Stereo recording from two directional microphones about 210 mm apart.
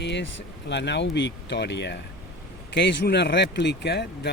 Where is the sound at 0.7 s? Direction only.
55° left (ahead or behind).